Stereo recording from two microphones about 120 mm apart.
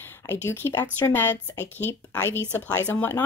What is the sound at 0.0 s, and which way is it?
A woman's voice, 20° left (ahead or behind).